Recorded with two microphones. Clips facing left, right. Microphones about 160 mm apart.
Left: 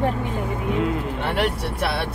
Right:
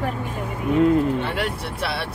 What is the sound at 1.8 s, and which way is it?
Speech, 60° left (ahead or behind).